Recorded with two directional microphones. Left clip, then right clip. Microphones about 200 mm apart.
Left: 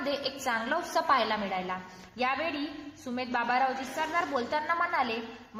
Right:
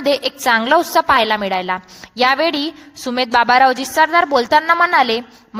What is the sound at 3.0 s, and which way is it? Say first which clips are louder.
A woman's voice: right 17 dB; 50° right (ahead or behind).